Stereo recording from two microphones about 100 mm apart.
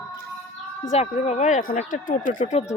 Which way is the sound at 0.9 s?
90° left.